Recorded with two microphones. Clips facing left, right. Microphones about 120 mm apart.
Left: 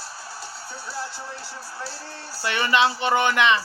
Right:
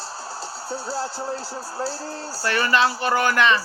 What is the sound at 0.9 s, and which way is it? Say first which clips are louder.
Speech: right 4 dB; 90° right.